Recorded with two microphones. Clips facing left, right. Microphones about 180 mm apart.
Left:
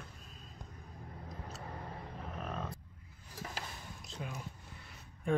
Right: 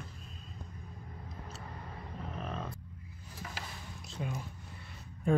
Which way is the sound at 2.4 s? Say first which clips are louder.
Even; centre (ahead or behind).